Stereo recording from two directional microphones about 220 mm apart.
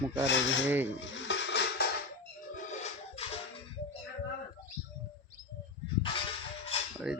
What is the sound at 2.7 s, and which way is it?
Music, 30° left (ahead or behind).